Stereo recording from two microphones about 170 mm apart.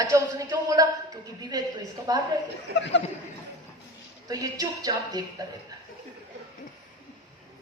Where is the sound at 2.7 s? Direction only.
90° left.